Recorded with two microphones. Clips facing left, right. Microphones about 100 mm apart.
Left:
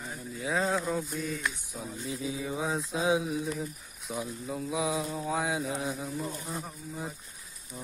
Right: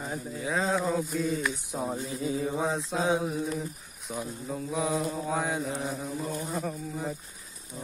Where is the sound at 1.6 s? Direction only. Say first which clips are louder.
Right 8 dB; 75° right (ahead or behind).